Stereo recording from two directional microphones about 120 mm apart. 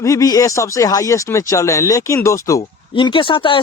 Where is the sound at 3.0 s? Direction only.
45° left (ahead or behind).